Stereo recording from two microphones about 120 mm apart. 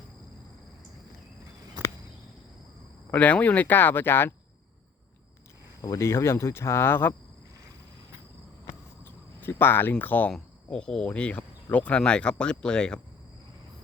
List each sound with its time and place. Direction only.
3.1 s speech: 10° left (ahead or behind)
5.8 s speech: 25° left (ahead or behind)
9.4 s speech: 20° left (ahead or behind)